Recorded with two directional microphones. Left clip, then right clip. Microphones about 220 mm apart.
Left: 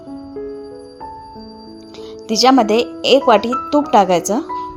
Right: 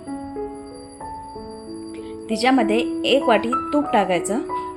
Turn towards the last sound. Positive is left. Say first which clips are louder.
# left 7 dB
turn(degrees=30)  # may be behind; listen again after turning